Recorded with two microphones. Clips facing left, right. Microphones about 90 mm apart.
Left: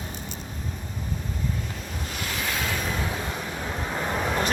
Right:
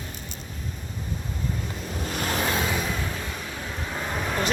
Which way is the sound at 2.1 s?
40° right (ahead or behind).